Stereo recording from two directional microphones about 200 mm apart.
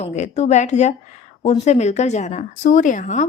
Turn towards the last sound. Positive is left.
turn(degrees=35)  # may be behind; listen again after turning